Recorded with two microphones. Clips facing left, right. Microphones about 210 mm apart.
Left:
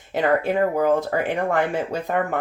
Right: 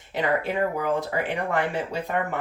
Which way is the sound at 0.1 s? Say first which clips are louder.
Left 5 dB; 45° left (ahead or behind).